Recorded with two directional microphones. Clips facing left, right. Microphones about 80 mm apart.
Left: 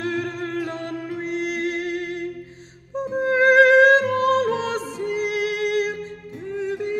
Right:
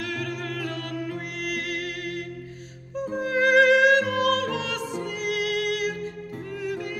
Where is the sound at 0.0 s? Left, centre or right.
Left.